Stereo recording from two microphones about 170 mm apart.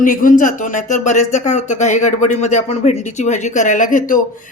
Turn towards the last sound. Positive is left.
turn(degrees=50)  # may be behind; listen again after turning